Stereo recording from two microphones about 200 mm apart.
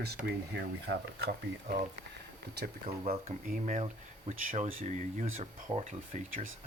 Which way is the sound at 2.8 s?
30° right (ahead or behind).